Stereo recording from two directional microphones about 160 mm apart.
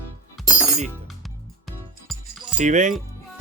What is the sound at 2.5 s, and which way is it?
Speech, 50° right (ahead or behind).